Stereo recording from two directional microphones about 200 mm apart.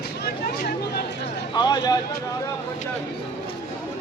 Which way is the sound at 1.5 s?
20° left (ahead or behind).